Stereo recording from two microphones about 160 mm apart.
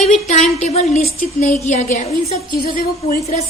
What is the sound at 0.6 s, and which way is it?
A woman's voice, 45° left (ahead or behind).